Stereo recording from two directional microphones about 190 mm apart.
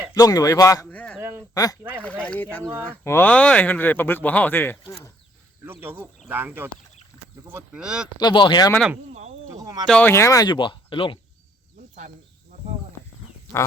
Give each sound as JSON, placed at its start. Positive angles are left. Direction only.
{"t": 0.1, "sound": "speech", "side_deg": 20}
{"t": 1.5, "sound": "speech", "side_deg": 20}
{"t": 2.0, "sound": "speech", "side_deg": 5}
{"t": 5.8, "sound": "speech", "side_deg": -10}
{"t": 8.2, "sound": "speech", "side_deg": 25}
{"t": 9.6, "sound": "a sound", "side_deg": -20}
{"t": 9.8, "sound": "speech", "side_deg": 5}